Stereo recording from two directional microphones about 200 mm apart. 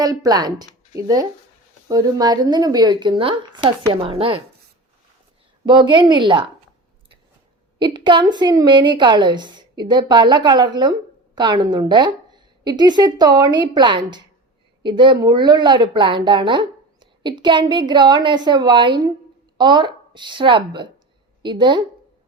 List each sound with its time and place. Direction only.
0.0 s speech: 20° right (ahead or behind)
5.6 s speech: 25° right (ahead or behind)
7.8 s speech: 20° right (ahead or behind)